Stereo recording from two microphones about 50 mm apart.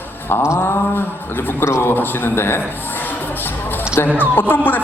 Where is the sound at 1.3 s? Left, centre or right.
Left.